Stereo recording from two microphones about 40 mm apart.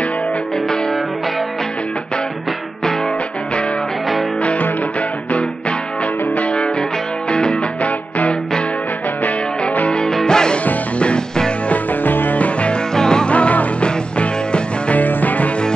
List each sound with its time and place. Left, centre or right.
4.4 s music: left
7.2 s music: left
9.8 s music: centre
11.0 s music: left
11.7 s music: left
12.9 s music: centre
13.3 s music: left
15.0 s music: left